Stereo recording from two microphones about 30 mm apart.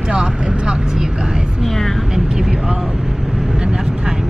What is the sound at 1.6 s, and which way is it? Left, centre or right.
Speech, centre.